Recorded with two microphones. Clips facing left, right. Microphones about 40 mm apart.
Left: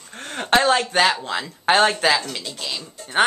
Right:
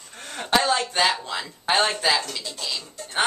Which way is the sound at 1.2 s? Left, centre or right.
Left.